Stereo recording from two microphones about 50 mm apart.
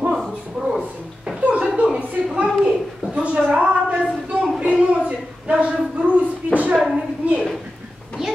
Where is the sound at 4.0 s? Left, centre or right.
Centre.